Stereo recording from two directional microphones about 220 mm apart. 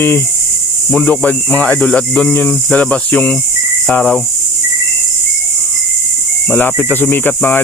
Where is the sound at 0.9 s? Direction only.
5° left (ahead or behind).